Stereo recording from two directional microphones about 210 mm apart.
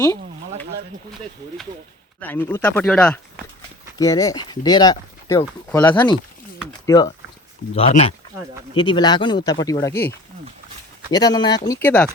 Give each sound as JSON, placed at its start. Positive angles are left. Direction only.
{"t": 2.2, "sound": "speech", "side_deg": 10}
{"t": 3.9, "sound": "speech", "side_deg": 15}
{"t": 7.8, "sound": "speech", "side_deg": 30}